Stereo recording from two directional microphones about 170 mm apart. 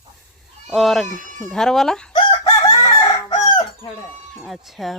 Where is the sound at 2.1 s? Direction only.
30° left (ahead or behind).